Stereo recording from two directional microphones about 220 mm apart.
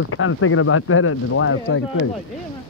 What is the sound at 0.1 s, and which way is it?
Speech, 70° left (ahead or behind).